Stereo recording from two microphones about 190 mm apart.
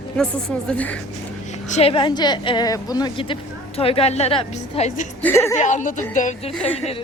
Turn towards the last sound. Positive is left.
turn(degrees=30)  # may be behind; listen again after turning